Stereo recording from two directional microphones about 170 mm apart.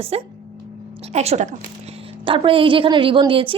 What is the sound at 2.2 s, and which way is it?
Speech, 30° right (ahead or behind).